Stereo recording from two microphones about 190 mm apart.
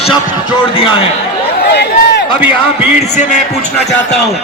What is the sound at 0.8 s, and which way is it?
Speech, 30° left (ahead or behind).